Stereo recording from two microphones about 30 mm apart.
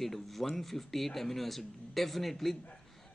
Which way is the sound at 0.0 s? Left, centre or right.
Centre.